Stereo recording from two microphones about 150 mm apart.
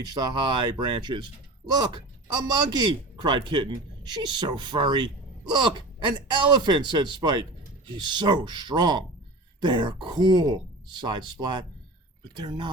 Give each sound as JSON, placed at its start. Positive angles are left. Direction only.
{"t": 0.0, "sound": "speech", "side_deg": -30}